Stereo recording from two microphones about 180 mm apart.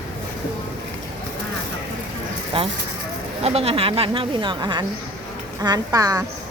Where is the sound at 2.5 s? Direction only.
30° right (ahead or behind).